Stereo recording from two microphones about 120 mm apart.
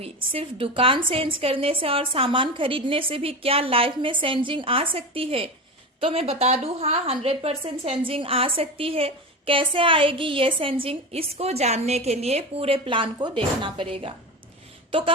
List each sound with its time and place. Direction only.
0.0 s a woman's voice: 50° right (ahead or behind)